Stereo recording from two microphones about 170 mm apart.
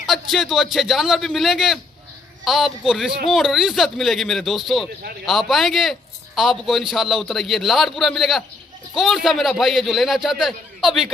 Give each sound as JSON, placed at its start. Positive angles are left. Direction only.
{"t": 0.0, "sound": "a man's voice", "side_deg": 0}